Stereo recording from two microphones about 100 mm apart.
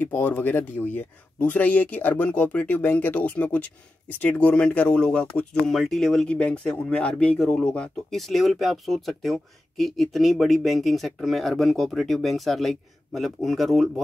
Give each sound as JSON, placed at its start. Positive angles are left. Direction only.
{"t": 0.0, "sound": "speech", "side_deg": 20}